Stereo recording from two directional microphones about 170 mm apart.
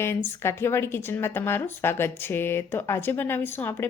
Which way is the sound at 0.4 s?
15° left (ahead or behind).